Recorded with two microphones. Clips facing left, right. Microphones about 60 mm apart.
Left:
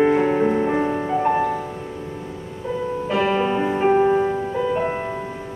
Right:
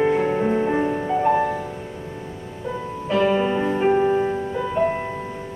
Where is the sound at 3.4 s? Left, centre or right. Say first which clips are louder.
Left 1 dB; centre.